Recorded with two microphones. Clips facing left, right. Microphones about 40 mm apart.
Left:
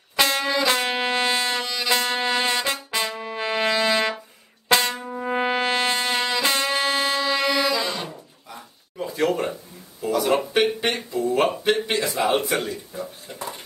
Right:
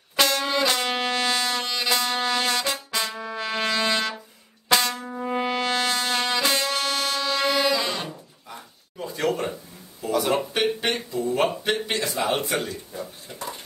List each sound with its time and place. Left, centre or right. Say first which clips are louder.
0.4 s music: left 1 dB; centre
0.7 s music: left 2 dB; centre
1.6 s music: even; centre
1.9 s music: left 2 dB; left
3.2 s brass instrument: left 3 dB; left
4.6 s trumpet: left 2 dB; left
5.2 s brass instrument: left 3 dB; left
6.4 s music: left 2 dB; centre
7.6 s music: even; centre
8.9 s a sound: left 3 dB; centre
10.3 s music: left 3 dB; centre
11.2 s speech: left 3 dB; centre